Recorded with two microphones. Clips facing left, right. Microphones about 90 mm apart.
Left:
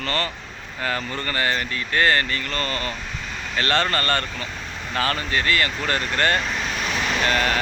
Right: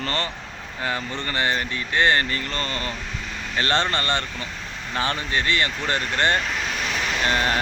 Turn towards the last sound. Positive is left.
turn(degrees=-25)  # may be behind; listen again after turning